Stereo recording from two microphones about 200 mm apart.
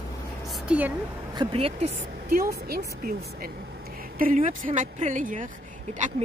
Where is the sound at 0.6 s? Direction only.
10° right (ahead or behind).